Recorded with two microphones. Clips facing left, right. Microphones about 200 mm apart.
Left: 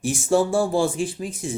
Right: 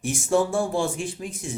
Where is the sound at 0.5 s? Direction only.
35° left (ahead or behind).